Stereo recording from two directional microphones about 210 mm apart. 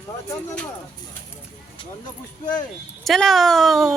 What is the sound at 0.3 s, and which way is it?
Speech, 10° left (ahead or behind).